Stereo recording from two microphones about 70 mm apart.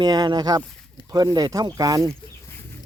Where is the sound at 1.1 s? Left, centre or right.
Right.